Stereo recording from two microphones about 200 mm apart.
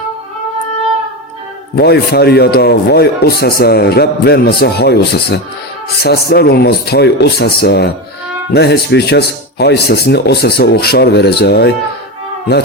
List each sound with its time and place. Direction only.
1.7 s a man's voice: 55° left (ahead or behind)